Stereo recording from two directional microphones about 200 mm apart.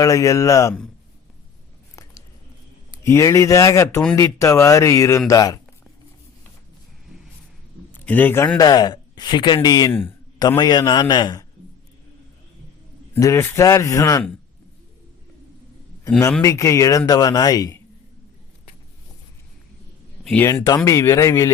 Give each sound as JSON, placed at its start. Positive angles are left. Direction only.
{"t": 0.0, "sound": "speech", "side_deg": 15}
{"t": 3.0, "sound": "speech", "side_deg": 15}
{"t": 7.9, "sound": "speech", "side_deg": 10}
{"t": 13.1, "sound": "speech", "side_deg": 15}
{"t": 16.0, "sound": "speech", "side_deg": 10}
{"t": 20.2, "sound": "speech", "side_deg": 10}